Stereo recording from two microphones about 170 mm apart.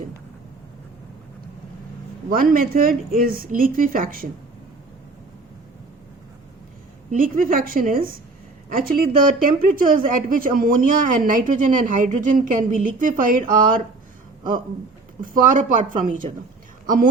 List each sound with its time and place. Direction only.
2.3 s a woman's voice: 55° right (ahead or behind)
7.1 s a woman's voice: 55° right (ahead or behind)
15.2 s speech: 50° right (ahead or behind)